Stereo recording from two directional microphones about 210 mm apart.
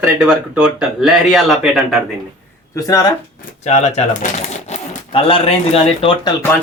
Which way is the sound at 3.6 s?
30° left (ahead or behind).